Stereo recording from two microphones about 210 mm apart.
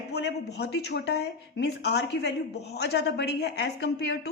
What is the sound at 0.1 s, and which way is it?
Speech, 55° left (ahead or behind).